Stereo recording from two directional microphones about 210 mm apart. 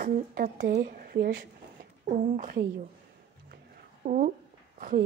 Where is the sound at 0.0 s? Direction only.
40° right (ahead or behind).